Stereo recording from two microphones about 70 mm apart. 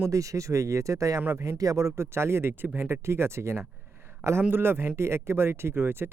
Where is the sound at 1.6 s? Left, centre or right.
Right.